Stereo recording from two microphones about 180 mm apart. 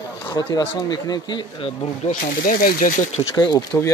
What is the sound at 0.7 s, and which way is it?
Speech, 25° left (ahead or behind).